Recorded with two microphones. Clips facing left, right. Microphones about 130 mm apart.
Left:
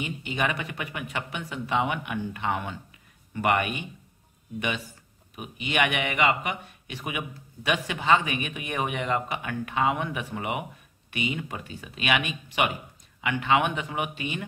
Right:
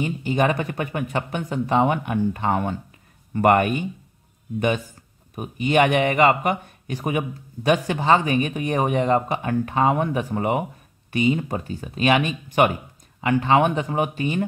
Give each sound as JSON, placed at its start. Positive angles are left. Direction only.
{"t": 0.0, "sound": "a man's voice", "side_deg": -40}